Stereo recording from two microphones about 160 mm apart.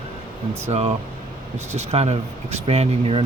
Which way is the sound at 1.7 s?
40° right (ahead or behind).